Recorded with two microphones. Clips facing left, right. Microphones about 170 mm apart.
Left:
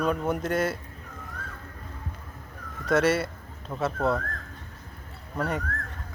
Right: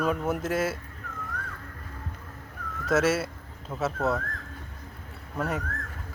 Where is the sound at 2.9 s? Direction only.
5° right (ahead or behind).